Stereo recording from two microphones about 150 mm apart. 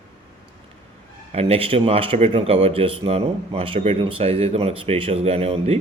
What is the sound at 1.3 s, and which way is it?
Speech, 40° right (ahead or behind).